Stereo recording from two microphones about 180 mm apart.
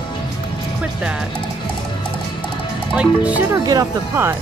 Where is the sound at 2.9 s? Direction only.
10° right (ahead or behind).